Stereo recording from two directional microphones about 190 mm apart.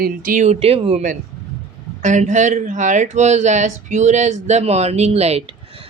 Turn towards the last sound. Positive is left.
turn(degrees=-35)  # may be behind; listen again after turning